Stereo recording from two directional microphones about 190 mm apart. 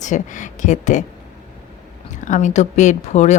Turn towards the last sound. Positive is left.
turn(degrees=40)  # may be behind; listen again after turning